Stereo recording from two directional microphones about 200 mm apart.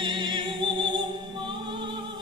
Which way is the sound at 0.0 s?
20° right (ahead or behind).